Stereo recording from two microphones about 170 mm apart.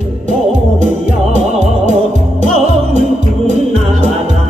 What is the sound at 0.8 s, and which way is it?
Music, 45° right (ahead or behind).